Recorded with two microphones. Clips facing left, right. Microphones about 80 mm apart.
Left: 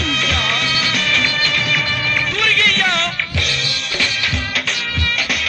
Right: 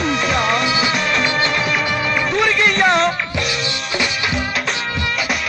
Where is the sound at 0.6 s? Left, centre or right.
Right.